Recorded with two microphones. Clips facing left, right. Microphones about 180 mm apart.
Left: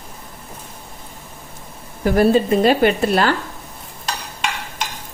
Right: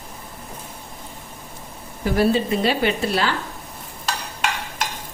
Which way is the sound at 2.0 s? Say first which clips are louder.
Left 4 dB; 50° left (ahead or behind).